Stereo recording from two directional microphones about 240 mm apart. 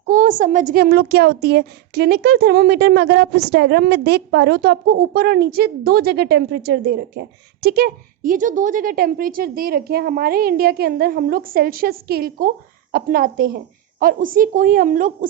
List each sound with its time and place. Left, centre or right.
0.0 s a woman's voice: right